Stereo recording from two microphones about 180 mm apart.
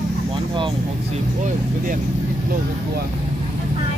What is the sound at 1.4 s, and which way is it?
Vehicle, 45° right (ahead or behind).